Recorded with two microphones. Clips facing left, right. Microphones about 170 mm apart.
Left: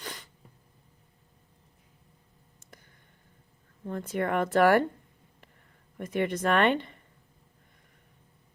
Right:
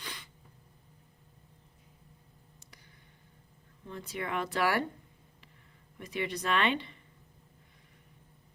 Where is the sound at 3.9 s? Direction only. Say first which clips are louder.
Left 8 dB; 50° left (ahead or behind).